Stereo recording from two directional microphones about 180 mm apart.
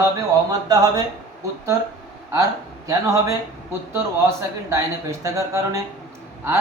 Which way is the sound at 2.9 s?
15° right (ahead or behind).